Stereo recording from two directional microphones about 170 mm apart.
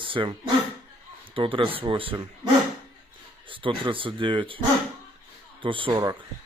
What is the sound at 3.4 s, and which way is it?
A man's voice, 30° right (ahead or behind).